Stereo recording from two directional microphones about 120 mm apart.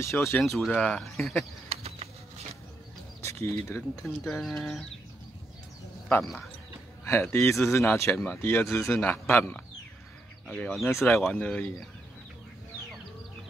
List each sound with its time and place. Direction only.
0.0 s speech: 20° left (ahead or behind)
0.4 s speech: centre (ahead or behind)
1.7 s bird flight: 55° right (ahead or behind)
3.2 s speech: 25° left (ahead or behind)
4.2 s speech: 5° left (ahead or behind)
7.1 s speech: 20° left (ahead or behind)